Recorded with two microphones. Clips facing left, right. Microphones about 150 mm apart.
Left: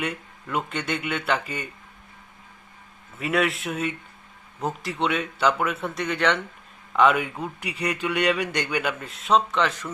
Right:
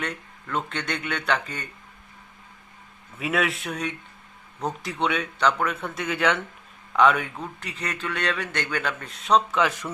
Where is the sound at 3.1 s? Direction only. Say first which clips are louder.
Left 2 dB; centre (ahead or behind).